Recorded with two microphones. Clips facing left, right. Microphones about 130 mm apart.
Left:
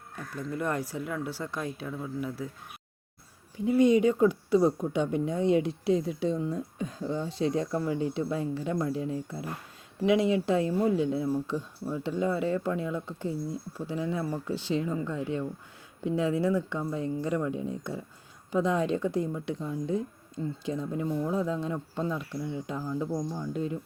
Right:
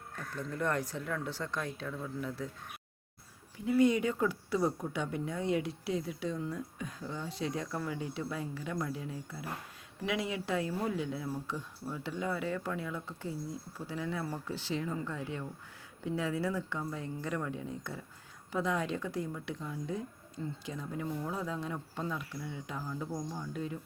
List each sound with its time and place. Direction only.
0.2 s speech: 10° left (ahead or behind)
3.8 s speech: 20° left (ahead or behind)
10.0 s speech: 25° left (ahead or behind)